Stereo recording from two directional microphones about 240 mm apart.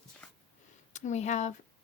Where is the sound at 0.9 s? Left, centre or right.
Left.